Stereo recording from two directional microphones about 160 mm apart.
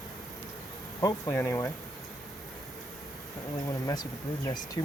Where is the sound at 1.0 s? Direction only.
15° left (ahead or behind).